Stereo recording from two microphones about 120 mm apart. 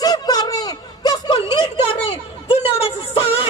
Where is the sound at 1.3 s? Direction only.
50° left (ahead or behind).